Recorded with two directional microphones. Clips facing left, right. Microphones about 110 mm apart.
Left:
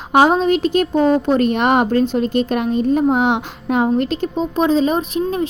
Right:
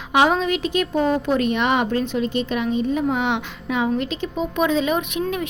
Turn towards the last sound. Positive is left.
turn(degrees=35)  # may be behind; listen again after turning